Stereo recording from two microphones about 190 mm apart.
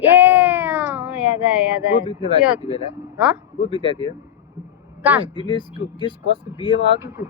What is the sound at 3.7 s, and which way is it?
Speech, 25° right (ahead or behind).